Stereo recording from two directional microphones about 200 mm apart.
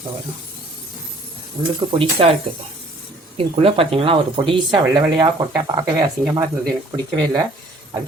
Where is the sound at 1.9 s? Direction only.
25° right (ahead or behind).